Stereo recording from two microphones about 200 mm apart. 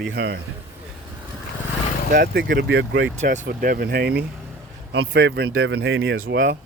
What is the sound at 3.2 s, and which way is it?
Speech, 45° right (ahead or behind).